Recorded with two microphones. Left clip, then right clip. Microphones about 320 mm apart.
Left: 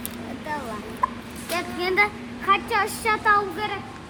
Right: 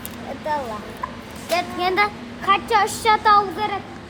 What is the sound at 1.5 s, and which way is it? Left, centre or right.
A woman's voice, right.